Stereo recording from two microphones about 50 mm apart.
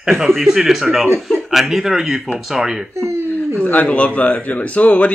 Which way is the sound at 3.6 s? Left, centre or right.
Left.